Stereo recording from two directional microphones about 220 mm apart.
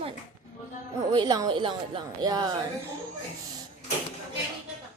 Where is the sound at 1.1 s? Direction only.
20° right (ahead or behind).